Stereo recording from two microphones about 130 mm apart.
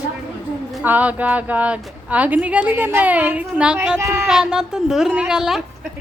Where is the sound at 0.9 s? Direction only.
10° right (ahead or behind).